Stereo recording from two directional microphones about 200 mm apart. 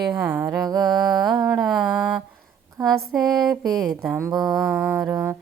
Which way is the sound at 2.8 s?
Centre (ahead or behind).